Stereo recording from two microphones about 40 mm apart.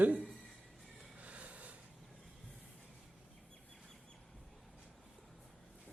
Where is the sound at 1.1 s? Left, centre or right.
Right.